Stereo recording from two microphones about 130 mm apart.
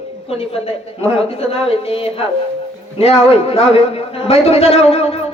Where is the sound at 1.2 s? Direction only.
50° left (ahead or behind).